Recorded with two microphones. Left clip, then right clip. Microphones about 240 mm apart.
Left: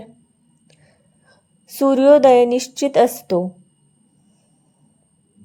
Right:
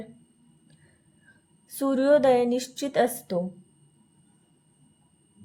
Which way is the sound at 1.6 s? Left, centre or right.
Left.